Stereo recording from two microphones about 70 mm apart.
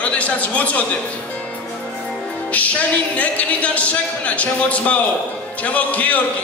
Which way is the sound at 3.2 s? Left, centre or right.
Centre.